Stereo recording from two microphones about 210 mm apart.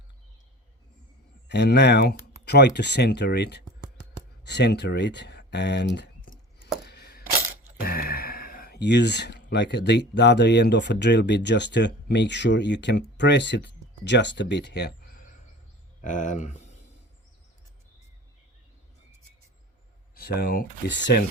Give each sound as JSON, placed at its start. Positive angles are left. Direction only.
{"t": 1.5, "sound": "speech", "side_deg": 55}
{"t": 6.8, "sound": "coin", "side_deg": 50}
{"t": 7.8, "sound": "speech", "side_deg": 45}
{"t": 16.0, "sound": "speech", "side_deg": 35}
{"t": 20.1, "sound": "speech", "side_deg": 50}